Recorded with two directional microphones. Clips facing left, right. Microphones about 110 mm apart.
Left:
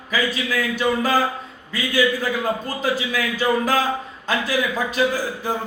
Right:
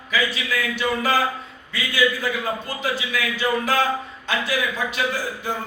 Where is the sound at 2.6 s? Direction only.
40° left (ahead or behind).